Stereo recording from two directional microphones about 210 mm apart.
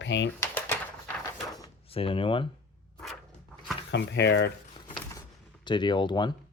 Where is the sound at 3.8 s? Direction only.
55° left (ahead or behind).